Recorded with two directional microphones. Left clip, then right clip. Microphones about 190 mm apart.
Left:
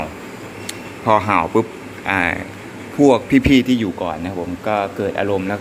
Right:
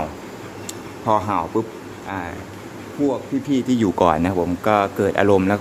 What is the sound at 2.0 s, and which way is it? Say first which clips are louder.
Speech: left 11 dB; 20° left (ahead or behind).